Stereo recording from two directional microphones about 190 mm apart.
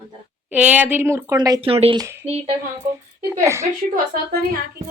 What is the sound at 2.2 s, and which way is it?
Speech, 5° right (ahead or behind).